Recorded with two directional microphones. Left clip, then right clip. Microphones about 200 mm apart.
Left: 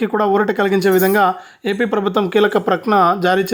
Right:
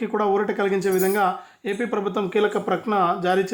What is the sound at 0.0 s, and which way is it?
Speech, 40° left (ahead or behind).